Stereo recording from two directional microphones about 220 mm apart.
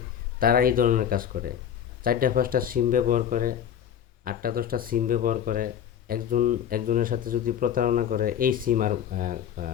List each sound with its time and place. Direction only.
0.3 s speech: 40° right (ahead or behind)